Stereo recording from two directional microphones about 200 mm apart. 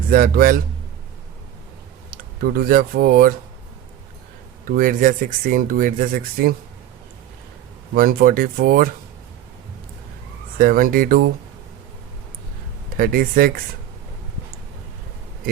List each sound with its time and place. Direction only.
0.1 s speech: 45° right (ahead or behind)
2.0 s speech: 45° right (ahead or behind)
4.6 s speech: 45° right (ahead or behind)
7.9 s speech: 45° right (ahead or behind)
10.6 s speech: 45° right (ahead or behind)
13.0 s speech: 45° right (ahead or behind)